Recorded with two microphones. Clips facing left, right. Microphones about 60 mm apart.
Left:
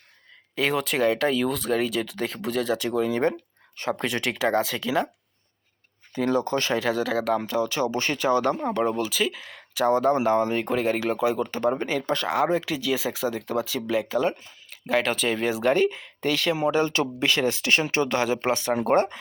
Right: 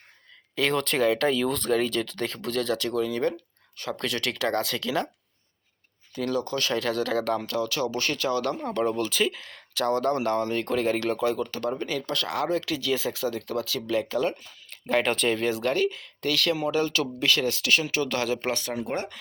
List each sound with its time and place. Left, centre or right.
0.5 s speech: centre
6.1 s speech: left
14.7 s speech: centre; by 18.7 s left
18.7 s speech: left